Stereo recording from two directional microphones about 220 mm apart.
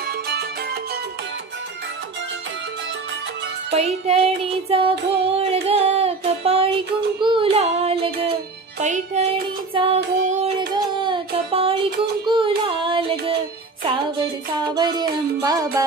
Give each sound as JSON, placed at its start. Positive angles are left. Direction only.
{"t": 3.7, "sound": "music", "side_deg": -25}
{"t": 10.7, "sound": "child singing", "side_deg": -20}
{"t": 12.3, "sound": "yodeling", "side_deg": -25}
{"t": 14.7, "sound": "music", "side_deg": -20}